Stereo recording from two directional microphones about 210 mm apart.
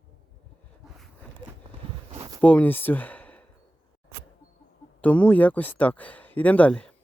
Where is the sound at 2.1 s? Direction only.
15° right (ahead or behind).